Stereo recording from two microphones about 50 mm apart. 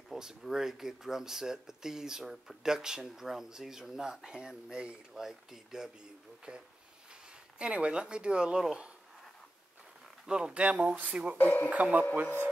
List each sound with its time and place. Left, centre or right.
0.1 s speech: centre
7.5 s speech: right
10.2 s speech: centre
11.3 s speech: left
11.7 s speech: right